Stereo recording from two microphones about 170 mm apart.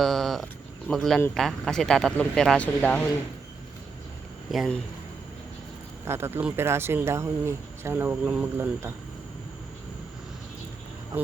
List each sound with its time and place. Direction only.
0.0 s speech: centre (ahead or behind)
4.5 s speech: centre (ahead or behind)
6.1 s speech: 15° right (ahead or behind)